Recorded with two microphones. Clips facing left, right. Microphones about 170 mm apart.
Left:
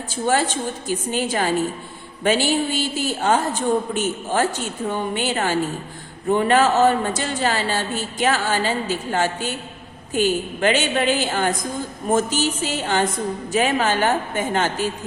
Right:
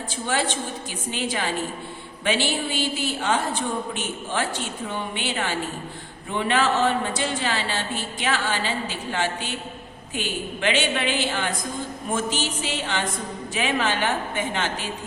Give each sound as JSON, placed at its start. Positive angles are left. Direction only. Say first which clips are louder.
{"t": 0.3, "sound": "a man's voice", "louder": "left 5 dB", "side_deg": 45}